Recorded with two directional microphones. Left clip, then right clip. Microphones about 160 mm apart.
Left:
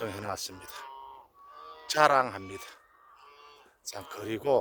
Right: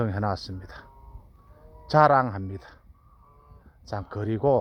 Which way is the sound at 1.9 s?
35° left (ahead or behind).